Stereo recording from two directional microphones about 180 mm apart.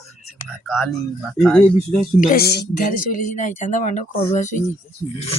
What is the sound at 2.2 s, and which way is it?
Speech, 60° left (ahead or behind).